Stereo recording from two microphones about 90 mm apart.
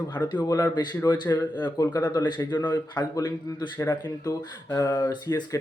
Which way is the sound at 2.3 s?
55° left (ahead or behind).